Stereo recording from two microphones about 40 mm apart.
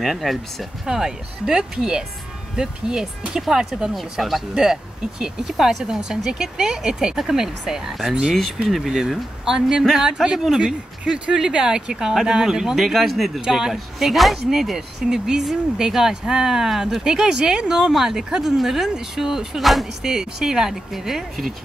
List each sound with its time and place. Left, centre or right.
0.0 s speech: centre
0.8 s speech: centre
3.9 s speech: centre
8.3 s speech: centre
13.4 s speech: centre
13.9 s speech: centre
19.6 s speech: centre
20.0 s speech: centre